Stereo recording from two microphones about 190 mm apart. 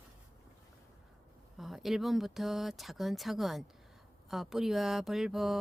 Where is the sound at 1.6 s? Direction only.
Centre (ahead or behind).